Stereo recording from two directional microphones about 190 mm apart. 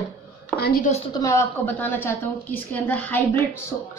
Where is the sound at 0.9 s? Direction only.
30° left (ahead or behind).